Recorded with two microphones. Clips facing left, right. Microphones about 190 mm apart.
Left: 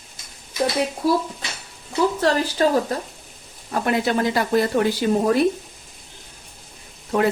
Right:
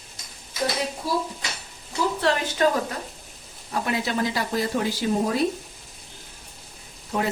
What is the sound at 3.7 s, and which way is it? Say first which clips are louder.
Speech: left 5 dB; 55° left (ahead or behind).